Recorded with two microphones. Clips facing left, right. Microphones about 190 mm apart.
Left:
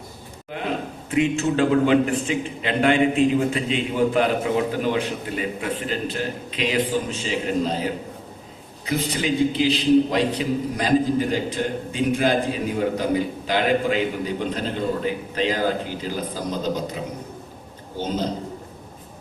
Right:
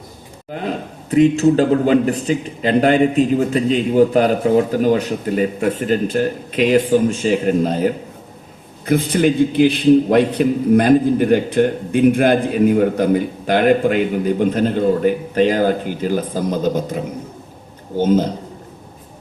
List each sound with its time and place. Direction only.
1.1 s a man's voice: 35° right (ahead or behind)